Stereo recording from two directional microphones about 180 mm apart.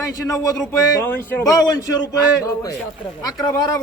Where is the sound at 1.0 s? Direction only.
10° left (ahead or behind).